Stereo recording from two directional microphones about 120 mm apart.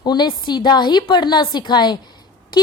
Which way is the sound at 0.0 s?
35° left (ahead or behind).